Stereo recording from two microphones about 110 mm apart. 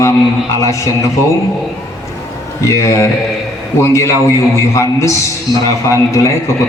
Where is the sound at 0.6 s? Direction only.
25° left (ahead or behind).